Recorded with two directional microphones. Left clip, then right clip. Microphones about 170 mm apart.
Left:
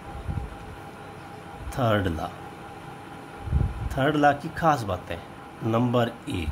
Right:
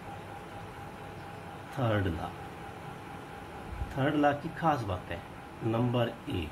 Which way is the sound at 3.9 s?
70° left (ahead or behind).